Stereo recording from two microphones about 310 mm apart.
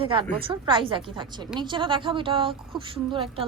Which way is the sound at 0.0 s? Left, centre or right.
Centre.